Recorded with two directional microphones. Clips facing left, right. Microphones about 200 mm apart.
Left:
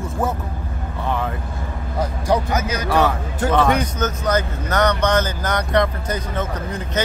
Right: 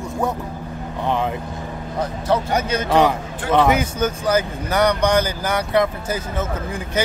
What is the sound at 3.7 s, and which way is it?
Speech, 10° right (ahead or behind).